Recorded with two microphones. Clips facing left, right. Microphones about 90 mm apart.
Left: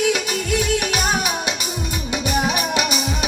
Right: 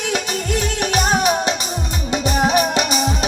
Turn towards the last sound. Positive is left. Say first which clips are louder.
# right 3 dB
turn(degrees=-35)  # may be behind; listen again after turning